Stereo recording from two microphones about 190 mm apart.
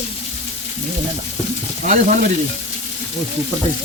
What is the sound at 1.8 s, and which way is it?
Frying, 40° right (ahead or behind).